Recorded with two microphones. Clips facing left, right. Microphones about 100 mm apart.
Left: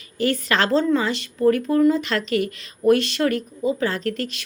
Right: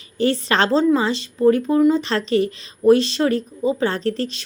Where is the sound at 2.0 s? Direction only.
30° right (ahead or behind).